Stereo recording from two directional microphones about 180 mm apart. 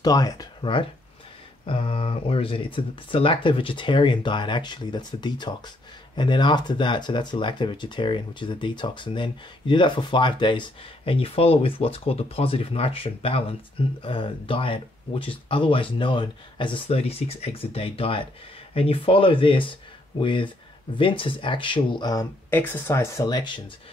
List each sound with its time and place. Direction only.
0.0 s speech: 20° left (ahead or behind)